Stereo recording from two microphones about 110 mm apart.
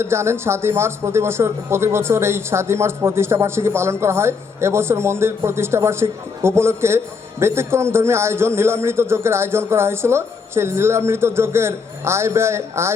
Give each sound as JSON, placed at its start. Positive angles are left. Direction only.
{"t": 0.0, "sound": "a man's voice", "side_deg": -25}